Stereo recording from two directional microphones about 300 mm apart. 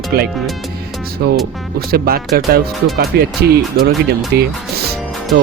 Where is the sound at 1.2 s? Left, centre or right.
Right.